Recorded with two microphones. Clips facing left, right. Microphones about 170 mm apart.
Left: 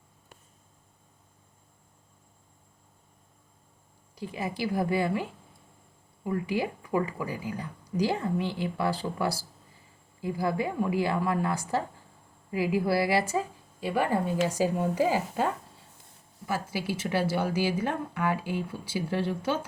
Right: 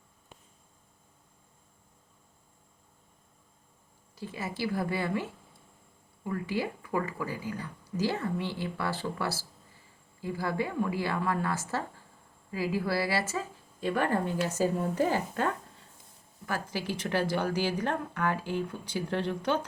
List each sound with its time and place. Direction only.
4.1 s speech: 15° left (ahead or behind)
16.5 s speech: 10° left (ahead or behind)